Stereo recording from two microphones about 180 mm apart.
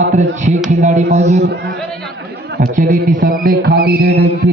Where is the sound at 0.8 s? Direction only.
40° right (ahead or behind).